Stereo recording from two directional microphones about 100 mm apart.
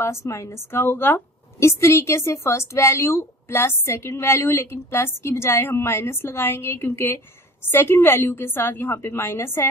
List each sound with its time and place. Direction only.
0.0 s a woman's voice: 30° left (ahead or behind)